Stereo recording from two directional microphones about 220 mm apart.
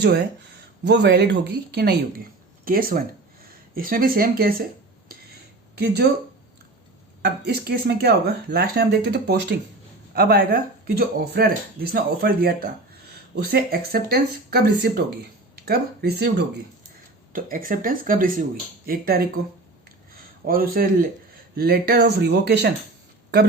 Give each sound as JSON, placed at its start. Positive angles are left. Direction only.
{"t": 0.0, "sound": "speech", "side_deg": -50}
{"t": 5.0, "sound": "a sound", "side_deg": -45}
{"t": 7.2, "sound": "speech", "side_deg": -50}
{"t": 20.5, "sound": "speech", "side_deg": -40}